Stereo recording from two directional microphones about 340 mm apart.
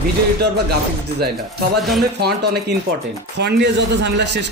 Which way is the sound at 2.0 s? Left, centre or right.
Right.